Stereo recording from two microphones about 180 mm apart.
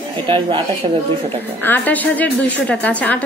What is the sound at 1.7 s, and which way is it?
A woman's voice, 10° left (ahead or behind).